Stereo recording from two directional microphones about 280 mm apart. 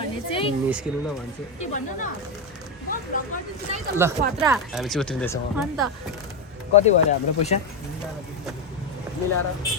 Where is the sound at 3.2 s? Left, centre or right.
Left.